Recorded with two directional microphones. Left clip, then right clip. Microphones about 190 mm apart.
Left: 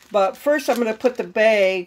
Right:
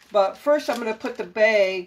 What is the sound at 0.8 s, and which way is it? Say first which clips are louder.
Speech: left 7 dB; 50° left (ahead or behind).